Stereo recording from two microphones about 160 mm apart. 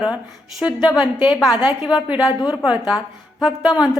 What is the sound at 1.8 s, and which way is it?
Speech, 5° right (ahead or behind).